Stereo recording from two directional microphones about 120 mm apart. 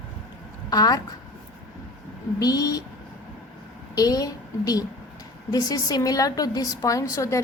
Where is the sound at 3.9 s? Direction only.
30° left (ahead or behind).